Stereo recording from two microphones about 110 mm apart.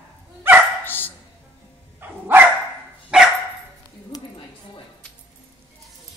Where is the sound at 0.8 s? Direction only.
20° left (ahead or behind).